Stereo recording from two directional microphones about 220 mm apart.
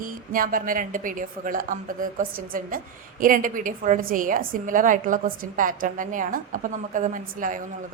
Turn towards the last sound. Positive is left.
turn(degrees=-35)  # may be behind; listen again after turning